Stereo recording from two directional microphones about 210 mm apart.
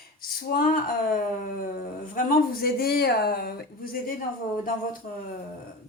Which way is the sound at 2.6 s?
45° left (ahead or behind).